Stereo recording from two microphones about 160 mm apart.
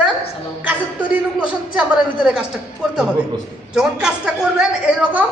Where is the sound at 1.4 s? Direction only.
5° right (ahead or behind).